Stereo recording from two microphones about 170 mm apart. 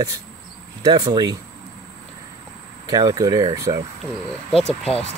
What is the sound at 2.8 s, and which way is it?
Speech, 20° right (ahead or behind).